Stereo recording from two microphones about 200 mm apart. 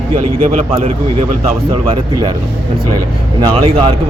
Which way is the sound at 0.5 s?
40° right (ahead or behind).